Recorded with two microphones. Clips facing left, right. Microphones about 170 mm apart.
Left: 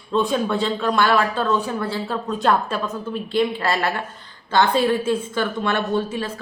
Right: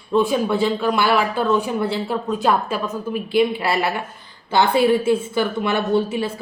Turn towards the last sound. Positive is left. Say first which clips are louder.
# right 3 dB
turn(degrees=-10)  # may be behind; listen again after turning